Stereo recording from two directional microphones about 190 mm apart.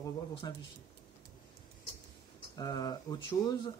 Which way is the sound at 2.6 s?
20° left (ahead or behind).